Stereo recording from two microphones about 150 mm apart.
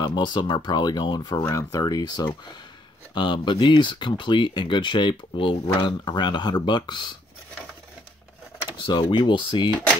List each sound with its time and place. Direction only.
0.0 s speech: 30° left (ahead or behind)
8.6 s speech: 35° left (ahead or behind)